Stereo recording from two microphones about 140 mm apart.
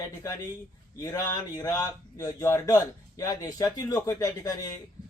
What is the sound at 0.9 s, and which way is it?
Speech, 25° left (ahead or behind).